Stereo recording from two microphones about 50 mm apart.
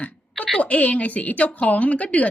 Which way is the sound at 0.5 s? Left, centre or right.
Left.